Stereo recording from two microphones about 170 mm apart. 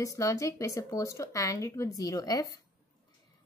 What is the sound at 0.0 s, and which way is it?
Speech, 20° left (ahead or behind).